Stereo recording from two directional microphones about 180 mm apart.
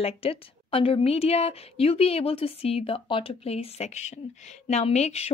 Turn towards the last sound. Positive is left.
turn(degrees=35)  # may be behind; listen again after turning